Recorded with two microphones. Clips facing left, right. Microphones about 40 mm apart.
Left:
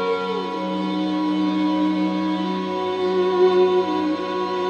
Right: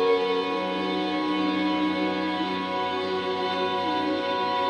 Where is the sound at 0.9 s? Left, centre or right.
Centre.